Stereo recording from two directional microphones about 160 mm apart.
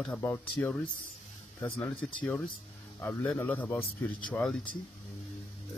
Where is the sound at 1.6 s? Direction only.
10° left (ahead or behind).